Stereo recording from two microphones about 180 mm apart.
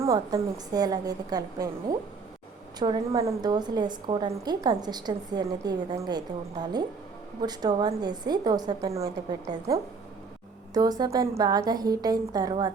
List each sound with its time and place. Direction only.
0.0 s a woman's voice: 15° right (ahead or behind)